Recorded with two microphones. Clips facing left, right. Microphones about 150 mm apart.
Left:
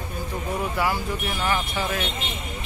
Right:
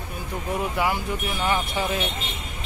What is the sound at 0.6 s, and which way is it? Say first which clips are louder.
Speech: even; 20° right (ahead or behind).